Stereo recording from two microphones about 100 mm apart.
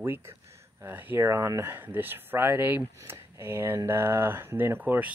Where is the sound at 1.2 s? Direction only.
30° right (ahead or behind).